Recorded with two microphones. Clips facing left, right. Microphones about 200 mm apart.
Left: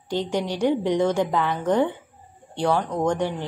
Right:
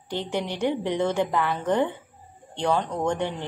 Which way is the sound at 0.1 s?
15° left (ahead or behind).